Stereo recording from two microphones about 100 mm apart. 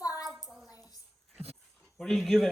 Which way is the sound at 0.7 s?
35° left (ahead or behind).